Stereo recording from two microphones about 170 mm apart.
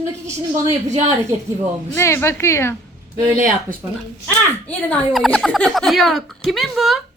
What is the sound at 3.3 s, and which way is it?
Speech, 50° right (ahead or behind).